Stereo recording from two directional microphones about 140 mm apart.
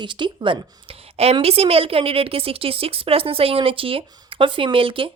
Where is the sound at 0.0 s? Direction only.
35° right (ahead or behind).